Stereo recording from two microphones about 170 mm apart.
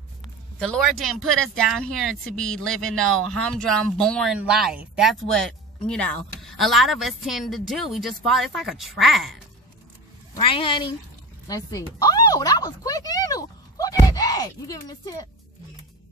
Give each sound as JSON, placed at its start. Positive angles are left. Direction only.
{"t": 0.6, "sound": "speech", "side_deg": 0}
{"t": 10.3, "sound": "a woman's voice", "side_deg": 30}
{"t": 11.4, "sound": "a sound", "side_deg": 20}